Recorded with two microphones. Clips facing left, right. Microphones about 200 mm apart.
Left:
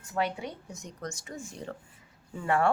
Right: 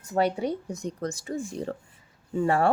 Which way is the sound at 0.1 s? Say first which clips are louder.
Right 7 dB; 40° right (ahead or behind).